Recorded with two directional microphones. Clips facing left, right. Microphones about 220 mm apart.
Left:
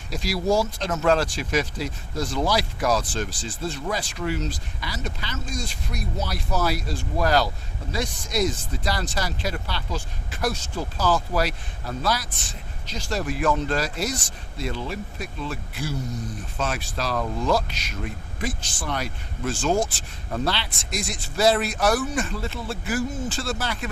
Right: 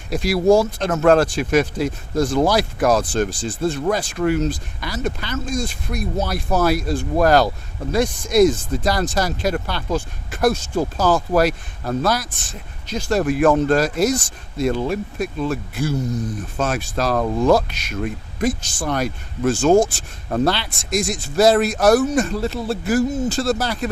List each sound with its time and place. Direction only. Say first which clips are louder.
0.1 s speech: right 8 dB; 60° right (ahead or behind); by 23.9 s 35° right (ahead or behind)